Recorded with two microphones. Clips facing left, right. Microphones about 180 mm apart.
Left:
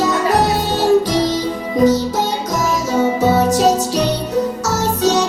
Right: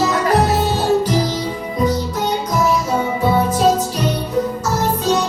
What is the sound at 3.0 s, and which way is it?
Music, 85° left.